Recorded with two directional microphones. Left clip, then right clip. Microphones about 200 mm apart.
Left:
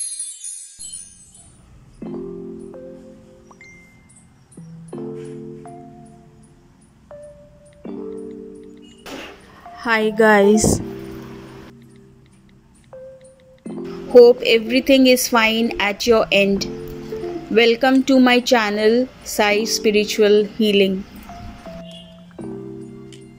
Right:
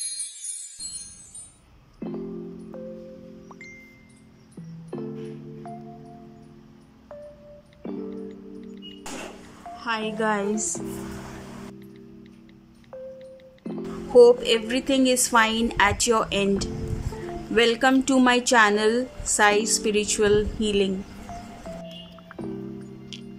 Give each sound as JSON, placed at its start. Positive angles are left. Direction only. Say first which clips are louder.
{"t": 3.4, "sound": "music", "louder": "left 1 dB", "side_deg": 0}
{"t": 7.8, "sound": "music", "louder": "left 4 dB", "side_deg": 0}
{"t": 9.8, "sound": "a woman's voice", "louder": "left 11 dB", "side_deg": 20}
{"t": 12.9, "sound": "speech", "louder": "even", "side_deg": 0}